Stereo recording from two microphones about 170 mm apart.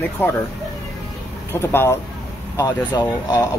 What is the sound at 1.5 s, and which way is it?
Speech, 15° left (ahead or behind).